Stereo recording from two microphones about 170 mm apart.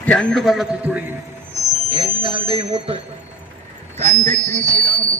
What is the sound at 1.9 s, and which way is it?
Speech, 25° right (ahead or behind).